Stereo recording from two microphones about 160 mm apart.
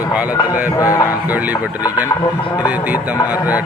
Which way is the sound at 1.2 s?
10° right (ahead or behind).